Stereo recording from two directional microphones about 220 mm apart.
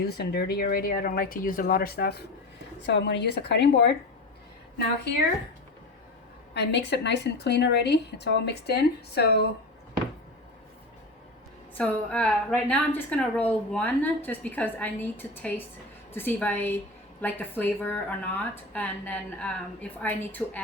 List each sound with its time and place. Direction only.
0.0 s a woman's voice: 45° left (ahead or behind)
6.5 s a woman's voice: 50° left (ahead or behind)
11.8 s a woman's voice: 5° left (ahead or behind)